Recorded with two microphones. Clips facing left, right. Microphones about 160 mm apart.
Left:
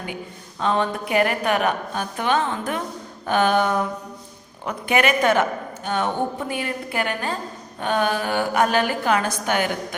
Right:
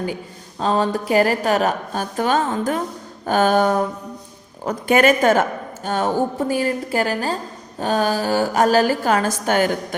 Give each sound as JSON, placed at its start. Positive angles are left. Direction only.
{"t": 0.6, "sound": "a woman's voice", "side_deg": -35}